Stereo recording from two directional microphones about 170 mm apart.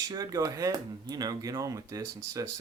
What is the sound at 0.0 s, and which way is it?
Speech, 20° right (ahead or behind).